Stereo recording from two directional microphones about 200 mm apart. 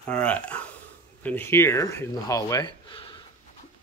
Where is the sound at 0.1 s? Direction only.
5° left (ahead or behind).